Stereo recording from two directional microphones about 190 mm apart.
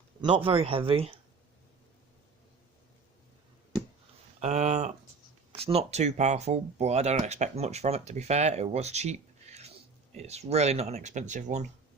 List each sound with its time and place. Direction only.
0.2 s speech: 30° right (ahead or behind)
4.4 s speech: 35° right (ahead or behind)